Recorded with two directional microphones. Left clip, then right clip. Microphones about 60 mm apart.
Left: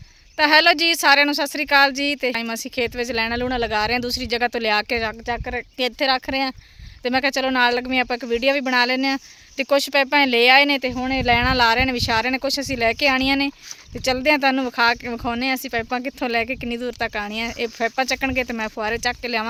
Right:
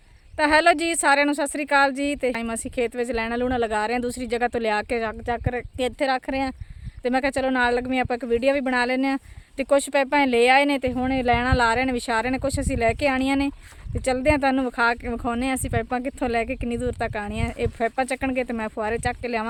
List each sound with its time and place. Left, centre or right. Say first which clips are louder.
0.3 s speech: left 3 dB; centre
2.2 s speech: left 2 dB; centre
3.4 s speech: left 1 dB; centre
3.7 s speech: left 3 dB; centre
5.2 s speech: left 1 dB; centre
6.0 s speech: left 4 dB; left
10.8 s speech: left 1 dB; centre
11.3 s speech: left 4 dB; left
15.4 s speech: left 3 dB; centre
15.9 s speech: left 1 dB; centre